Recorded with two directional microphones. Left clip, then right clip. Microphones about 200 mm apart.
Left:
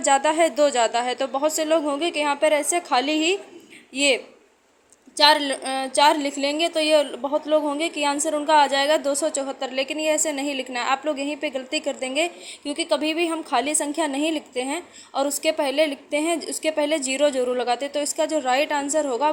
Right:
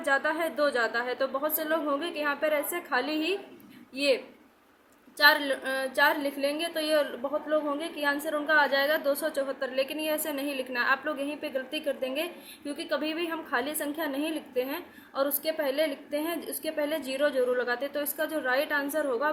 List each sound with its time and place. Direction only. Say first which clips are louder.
0.0 s a woman's voice: left 8 dB; 25° left (ahead or behind)